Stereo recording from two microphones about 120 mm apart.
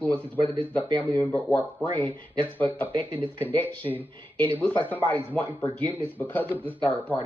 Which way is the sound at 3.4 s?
15° left (ahead or behind).